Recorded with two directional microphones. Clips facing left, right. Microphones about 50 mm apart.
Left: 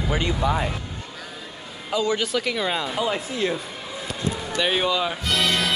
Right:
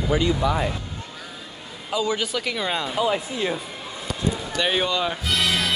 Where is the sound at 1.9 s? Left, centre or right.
Centre.